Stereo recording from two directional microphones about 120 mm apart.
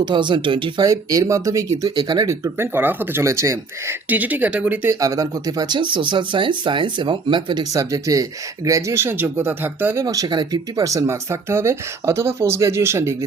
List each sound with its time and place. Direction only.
0.0 s speech: 40° right (ahead or behind)
0.9 s speech: 30° right (ahead or behind); by 4.9 s 15° right (ahead or behind)
4.9 s speech: 30° right (ahead or behind)